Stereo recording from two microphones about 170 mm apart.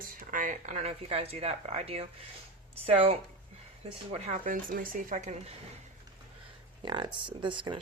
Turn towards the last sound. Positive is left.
turn(degrees=-30)  # may be behind; listen again after turning